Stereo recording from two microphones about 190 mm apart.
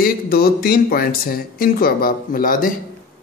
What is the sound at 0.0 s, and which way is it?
Speech, 55° left (ahead or behind).